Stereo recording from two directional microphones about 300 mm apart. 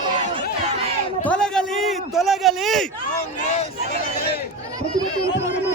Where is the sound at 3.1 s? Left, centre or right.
Left.